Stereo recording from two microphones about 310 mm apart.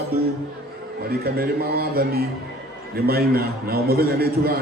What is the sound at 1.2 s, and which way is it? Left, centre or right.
A man's voice, right.